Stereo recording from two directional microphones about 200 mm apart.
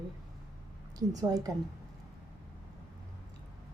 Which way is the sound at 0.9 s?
20° right (ahead or behind).